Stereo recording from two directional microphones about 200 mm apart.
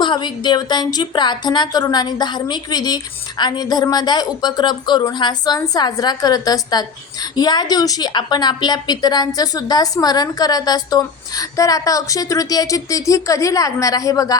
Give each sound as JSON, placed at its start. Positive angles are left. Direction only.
{"t": 0.0, "sound": "a woman's voice", "side_deg": 25}